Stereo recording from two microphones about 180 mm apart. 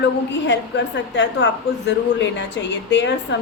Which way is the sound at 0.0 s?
75° left (ahead or behind).